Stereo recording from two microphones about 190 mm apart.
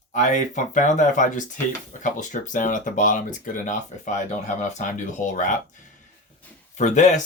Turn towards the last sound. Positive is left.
turn(degrees=40)  # may be behind; listen again after turning